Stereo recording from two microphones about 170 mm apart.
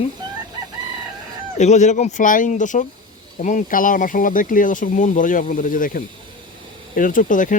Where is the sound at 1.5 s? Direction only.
45° left (ahead or behind).